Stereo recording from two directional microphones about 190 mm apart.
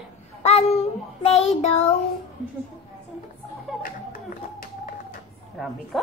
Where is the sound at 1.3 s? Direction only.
35° left (ahead or behind).